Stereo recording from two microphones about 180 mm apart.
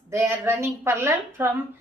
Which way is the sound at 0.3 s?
15° right (ahead or behind).